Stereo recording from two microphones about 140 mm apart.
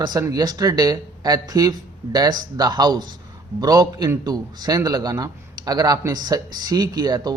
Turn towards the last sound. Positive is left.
turn(degrees=-30)  # may be behind; listen again after turning